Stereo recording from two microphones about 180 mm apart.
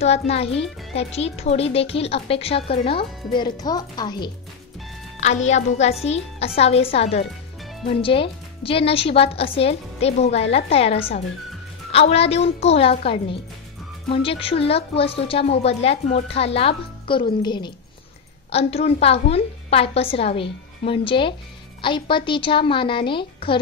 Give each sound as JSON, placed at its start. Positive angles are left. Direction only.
{"t": 0.0, "sound": "speech", "side_deg": 35}
{"t": 5.2, "sound": "a woman's voice", "side_deg": 40}